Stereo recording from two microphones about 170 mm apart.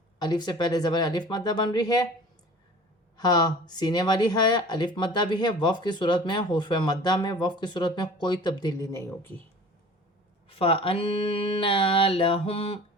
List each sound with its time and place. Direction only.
0.2 s speech: 25° left (ahead or behind)
3.2 s speech: 25° left (ahead or behind)
10.5 s a sound: 30° left (ahead or behind)